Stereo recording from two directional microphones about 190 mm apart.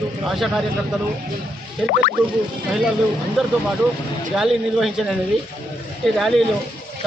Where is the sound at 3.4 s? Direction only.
5° right (ahead or behind).